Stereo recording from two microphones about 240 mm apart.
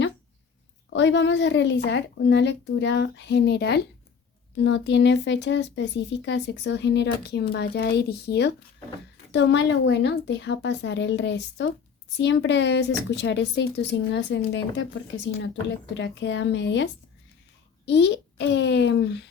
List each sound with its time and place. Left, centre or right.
0.9 s a woman's voice: left